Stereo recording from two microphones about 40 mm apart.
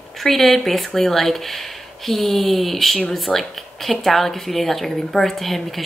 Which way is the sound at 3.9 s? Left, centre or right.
Centre.